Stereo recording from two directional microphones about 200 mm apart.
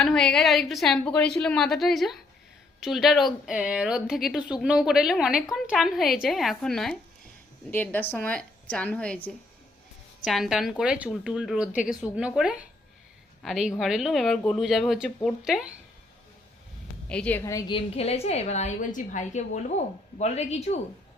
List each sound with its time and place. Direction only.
0.0 s a woman's voice: centre (ahead or behind)
17.1 s a woman's voice: 5° left (ahead or behind); by 20.7 s 35° left (ahead or behind)